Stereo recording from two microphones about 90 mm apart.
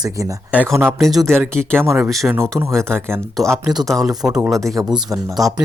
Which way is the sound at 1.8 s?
25° right (ahead or behind).